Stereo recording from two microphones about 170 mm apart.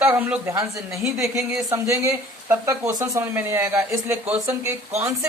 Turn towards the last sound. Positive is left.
turn(degrees=-15)  # may be behind; listen again after turning